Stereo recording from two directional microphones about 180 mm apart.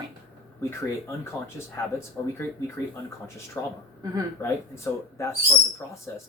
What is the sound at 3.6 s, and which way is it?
Speech, 10° left (ahead or behind).